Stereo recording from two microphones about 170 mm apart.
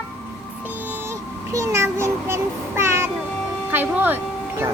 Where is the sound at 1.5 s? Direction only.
15° right (ahead or behind).